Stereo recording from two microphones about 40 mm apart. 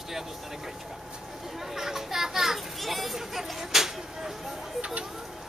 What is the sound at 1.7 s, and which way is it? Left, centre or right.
Speech, centre.